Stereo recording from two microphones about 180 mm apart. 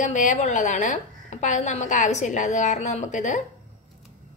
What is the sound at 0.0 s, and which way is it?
A woman's voice, 45° left (ahead or behind).